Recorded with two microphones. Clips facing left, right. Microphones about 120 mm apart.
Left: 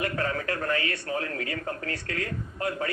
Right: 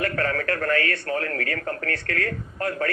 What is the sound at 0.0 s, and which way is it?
Speech, 20° left (ahead or behind).